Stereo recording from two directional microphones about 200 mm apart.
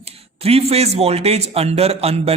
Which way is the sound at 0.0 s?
30° right (ahead or behind).